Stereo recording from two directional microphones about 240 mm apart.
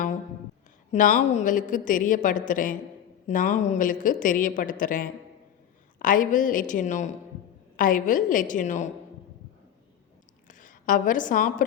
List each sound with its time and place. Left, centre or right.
0.9 s a woman's voice: left
10.5 s a woman's voice: left